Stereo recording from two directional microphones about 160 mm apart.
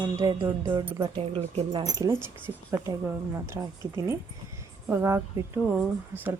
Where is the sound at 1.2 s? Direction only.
35° right (ahead or behind).